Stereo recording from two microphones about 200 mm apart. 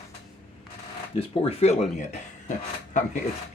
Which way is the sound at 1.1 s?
25° left (ahead or behind).